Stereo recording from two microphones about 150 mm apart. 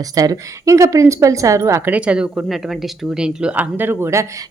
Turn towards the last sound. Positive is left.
turn(degrees=-15)  # may be behind; listen again after turning